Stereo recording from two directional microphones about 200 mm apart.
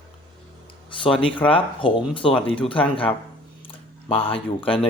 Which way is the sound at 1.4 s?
25° left (ahead or behind).